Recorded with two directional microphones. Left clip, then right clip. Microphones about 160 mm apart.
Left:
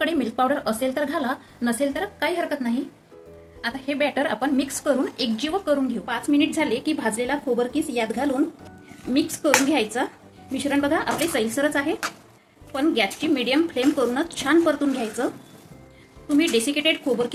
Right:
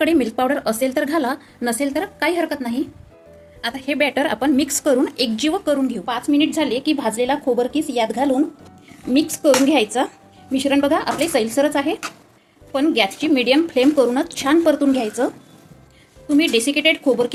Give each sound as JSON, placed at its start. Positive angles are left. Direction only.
{"t": 0.0, "sound": "a woman's voice", "side_deg": -55}
{"t": 6.1, "sound": "a woman's voice", "side_deg": -35}
{"t": 9.6, "sound": "a woman's voice", "side_deg": -35}
{"t": 16.4, "sound": "a woman's voice", "side_deg": -35}